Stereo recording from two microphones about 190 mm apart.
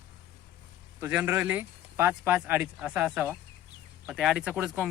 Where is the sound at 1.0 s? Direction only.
10° right (ahead or behind).